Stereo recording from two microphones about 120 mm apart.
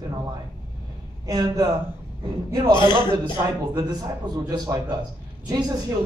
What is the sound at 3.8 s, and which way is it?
A man's voice, 35° right (ahead or behind).